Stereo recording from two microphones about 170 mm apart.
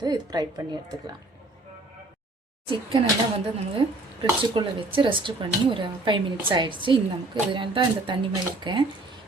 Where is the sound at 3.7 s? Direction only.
30° right (ahead or behind).